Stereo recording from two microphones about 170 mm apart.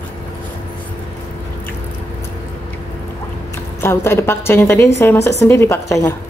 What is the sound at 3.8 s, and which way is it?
A woman's voice, 15° left (ahead or behind).